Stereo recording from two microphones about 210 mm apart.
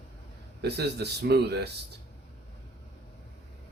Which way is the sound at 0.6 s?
50° right (ahead or behind).